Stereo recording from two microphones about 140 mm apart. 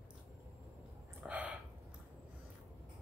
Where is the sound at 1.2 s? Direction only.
10° right (ahead or behind).